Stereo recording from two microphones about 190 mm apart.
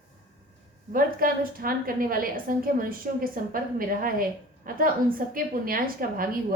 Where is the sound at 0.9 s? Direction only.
50° right (ahead or behind).